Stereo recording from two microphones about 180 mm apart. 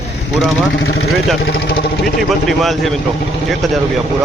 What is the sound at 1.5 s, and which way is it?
Speech, 60° left (ahead or behind).